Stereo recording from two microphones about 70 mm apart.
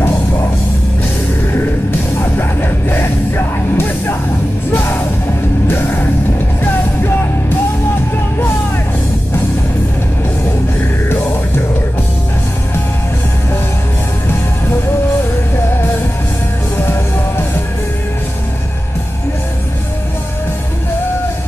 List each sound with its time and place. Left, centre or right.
1.5 s music: left
16.7 s music: left